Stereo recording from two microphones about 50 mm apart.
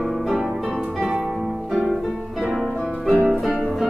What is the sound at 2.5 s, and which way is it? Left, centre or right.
Harp, centre.